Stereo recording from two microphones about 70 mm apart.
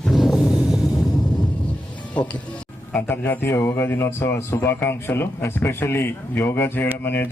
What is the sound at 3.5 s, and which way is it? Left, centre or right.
A man's voice, left.